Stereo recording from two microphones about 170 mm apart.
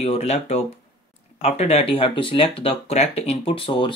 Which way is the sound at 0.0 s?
40° left (ahead or behind).